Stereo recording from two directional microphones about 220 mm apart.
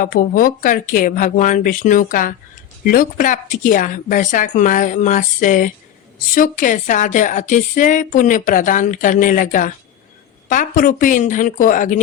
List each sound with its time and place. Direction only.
0.0 s a woman's voice: 40° left (ahead or behind)